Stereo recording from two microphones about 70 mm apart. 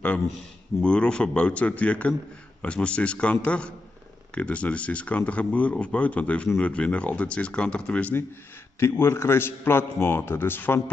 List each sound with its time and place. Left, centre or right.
0.8 s speech: centre
8.7 s a man's voice: left